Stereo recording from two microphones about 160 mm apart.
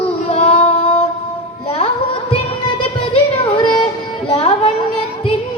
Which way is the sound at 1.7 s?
35° left (ahead or behind).